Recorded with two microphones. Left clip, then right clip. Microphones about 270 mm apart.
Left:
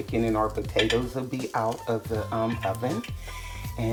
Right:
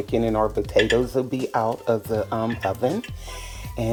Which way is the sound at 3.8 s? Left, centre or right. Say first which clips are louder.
Right 5 dB; right.